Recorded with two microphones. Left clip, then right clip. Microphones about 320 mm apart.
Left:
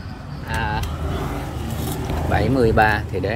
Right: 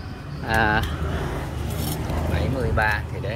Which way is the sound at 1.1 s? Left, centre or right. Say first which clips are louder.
Left 4 dB; left.